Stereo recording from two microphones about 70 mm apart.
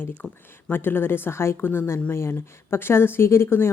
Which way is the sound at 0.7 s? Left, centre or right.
Left.